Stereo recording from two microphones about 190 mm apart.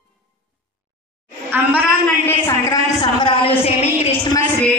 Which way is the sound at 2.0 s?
15° left (ahead or behind).